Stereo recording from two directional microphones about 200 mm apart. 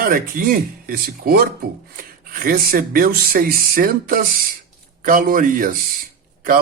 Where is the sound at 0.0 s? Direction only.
45° right (ahead or behind).